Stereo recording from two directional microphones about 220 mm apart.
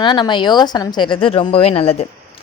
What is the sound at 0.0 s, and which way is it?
A woman's voice, 20° left (ahead or behind).